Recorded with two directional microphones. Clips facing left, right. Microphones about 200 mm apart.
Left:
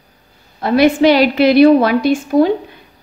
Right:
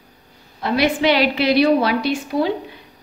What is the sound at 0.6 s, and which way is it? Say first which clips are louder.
A woman's voice: left 7 dB; 50° left (ahead or behind).